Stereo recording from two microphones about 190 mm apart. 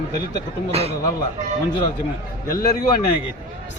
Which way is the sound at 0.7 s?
30° right (ahead or behind).